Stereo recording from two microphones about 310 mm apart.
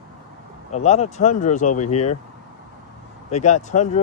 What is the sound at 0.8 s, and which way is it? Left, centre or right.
Speech, left.